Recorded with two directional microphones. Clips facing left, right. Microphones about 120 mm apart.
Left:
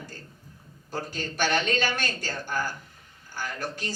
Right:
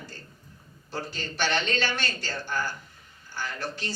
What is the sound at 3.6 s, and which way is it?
Speech, 45° left (ahead or behind).